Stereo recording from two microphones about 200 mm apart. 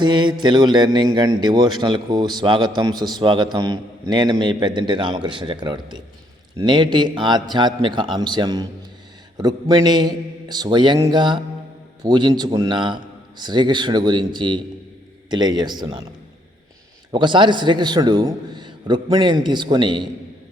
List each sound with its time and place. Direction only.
0.0 s a man's voice: 25° right (ahead or behind)
17.1 s a man's voice: 25° right (ahead or behind)